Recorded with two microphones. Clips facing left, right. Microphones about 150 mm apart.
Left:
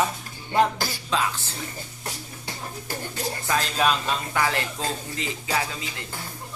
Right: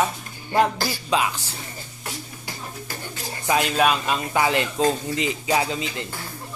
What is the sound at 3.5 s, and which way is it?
Speech, 15° right (ahead or behind).